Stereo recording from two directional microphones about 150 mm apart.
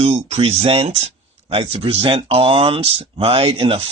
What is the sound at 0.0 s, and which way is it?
Speech, 45° right (ahead or behind).